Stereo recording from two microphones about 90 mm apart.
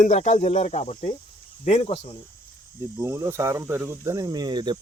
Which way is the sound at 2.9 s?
30° right (ahead or behind).